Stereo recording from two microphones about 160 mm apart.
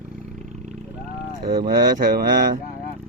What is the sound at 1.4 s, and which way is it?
Speech, 70° right (ahead or behind).